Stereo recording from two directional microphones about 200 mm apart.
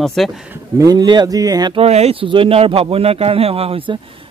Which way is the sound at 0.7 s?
20° right (ahead or behind).